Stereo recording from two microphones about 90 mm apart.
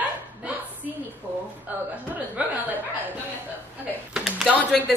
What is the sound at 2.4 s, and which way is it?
Chuckle, 15° right (ahead or behind).